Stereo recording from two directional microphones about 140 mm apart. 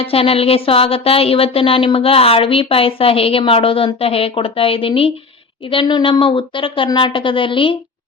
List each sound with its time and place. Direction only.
0.0 s a woman's voice: 45° left (ahead or behind)